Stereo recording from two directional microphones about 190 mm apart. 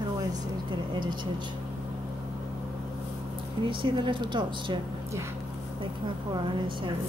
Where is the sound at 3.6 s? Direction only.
25° right (ahead or behind).